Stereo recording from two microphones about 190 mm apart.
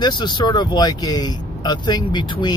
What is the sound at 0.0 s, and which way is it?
Speech, 20° left (ahead or behind).